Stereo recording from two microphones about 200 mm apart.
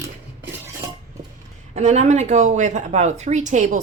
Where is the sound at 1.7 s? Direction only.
35° right (ahead or behind).